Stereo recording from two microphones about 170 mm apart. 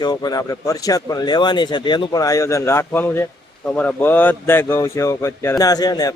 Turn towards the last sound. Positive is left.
turn(degrees=20)  # may be behind; listen again after turning